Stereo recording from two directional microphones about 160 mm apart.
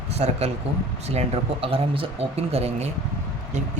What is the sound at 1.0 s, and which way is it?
Speech, 40° right (ahead or behind).